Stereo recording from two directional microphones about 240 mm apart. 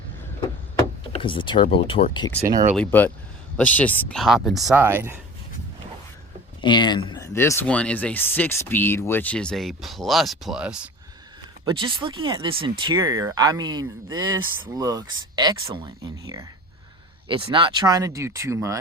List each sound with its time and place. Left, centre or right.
1.1 s door: left
1.5 s speech: left
2.4 s speech: centre
2.7 s speech: centre
6.6 s speech: centre
11.6 s speech: right